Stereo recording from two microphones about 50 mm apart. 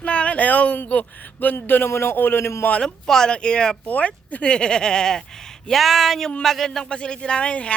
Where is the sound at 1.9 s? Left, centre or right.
Left.